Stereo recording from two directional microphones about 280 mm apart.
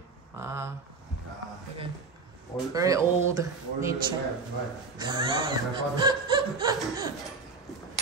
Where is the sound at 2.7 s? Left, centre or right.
Centre.